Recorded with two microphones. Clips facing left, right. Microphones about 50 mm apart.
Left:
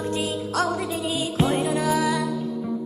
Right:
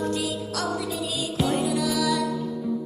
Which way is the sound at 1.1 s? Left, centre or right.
Left.